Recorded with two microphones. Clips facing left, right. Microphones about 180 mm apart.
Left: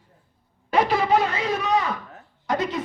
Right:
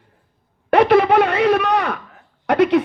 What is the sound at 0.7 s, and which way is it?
Speech, 65° right (ahead or behind).